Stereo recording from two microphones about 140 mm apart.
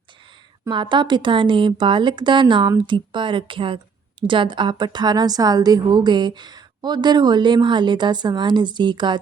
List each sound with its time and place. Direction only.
0.7 s a woman's voice: 35° right (ahead or behind)